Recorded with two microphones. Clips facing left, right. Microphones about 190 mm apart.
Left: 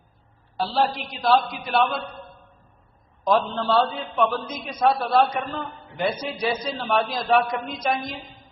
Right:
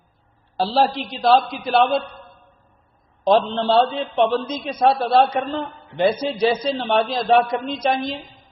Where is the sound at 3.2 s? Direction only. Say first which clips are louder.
Right 5 dB; 30° right (ahead or behind).